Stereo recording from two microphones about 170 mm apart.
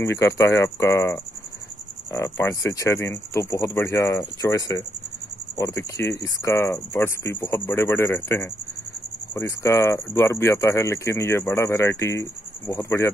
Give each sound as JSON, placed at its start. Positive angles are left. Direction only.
{"t": 0.0, "sound": "speech", "side_deg": 15}